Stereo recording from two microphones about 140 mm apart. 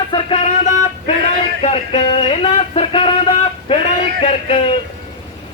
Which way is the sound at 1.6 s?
45° left (ahead or behind).